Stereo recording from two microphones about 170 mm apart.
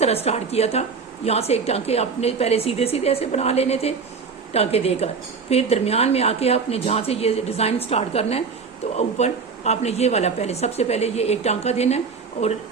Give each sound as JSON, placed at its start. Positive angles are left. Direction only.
{"t": 0.0, "sound": "a woman's voice", "side_deg": 40}